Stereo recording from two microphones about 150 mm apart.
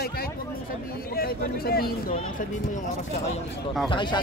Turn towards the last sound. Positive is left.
turn(degrees=30)  # may be behind; listen again after turning